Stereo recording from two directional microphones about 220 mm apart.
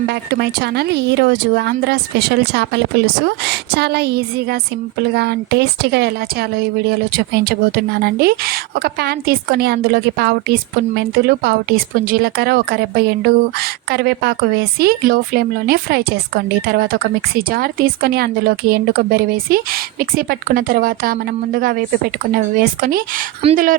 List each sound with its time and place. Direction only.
0.1 s speech: 50° right (ahead or behind)
8.0 s speech: 45° right (ahead or behind)
23.4 s speech: 25° right (ahead or behind)